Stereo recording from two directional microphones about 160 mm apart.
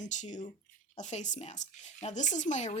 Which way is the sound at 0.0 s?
50° left (ahead or behind).